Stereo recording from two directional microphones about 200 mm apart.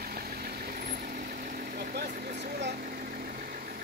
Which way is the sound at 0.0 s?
50° right (ahead or behind).